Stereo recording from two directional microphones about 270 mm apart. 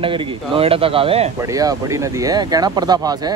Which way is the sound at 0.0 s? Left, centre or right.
Centre.